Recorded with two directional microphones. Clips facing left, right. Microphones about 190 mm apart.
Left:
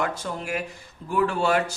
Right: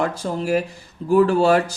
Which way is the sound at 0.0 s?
35° right (ahead or behind).